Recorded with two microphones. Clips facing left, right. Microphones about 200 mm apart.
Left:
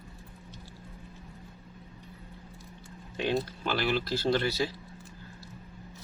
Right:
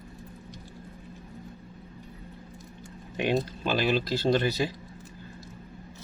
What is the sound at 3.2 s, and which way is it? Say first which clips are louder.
Speech: right 3 dB; 15° right (ahead or behind).